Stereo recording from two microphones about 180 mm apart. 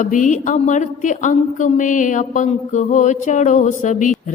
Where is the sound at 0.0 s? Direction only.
45° left (ahead or behind).